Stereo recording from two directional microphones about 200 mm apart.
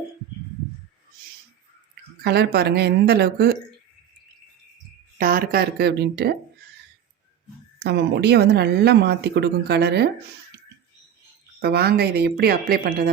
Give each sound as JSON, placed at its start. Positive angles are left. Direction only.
{"t": 2.2, "sound": "a woman's voice", "side_deg": -55}
{"t": 5.1, "sound": "a woman's voice", "side_deg": -45}
{"t": 7.8, "sound": "speech", "side_deg": -55}
{"t": 11.6, "sound": "a woman's voice", "side_deg": -55}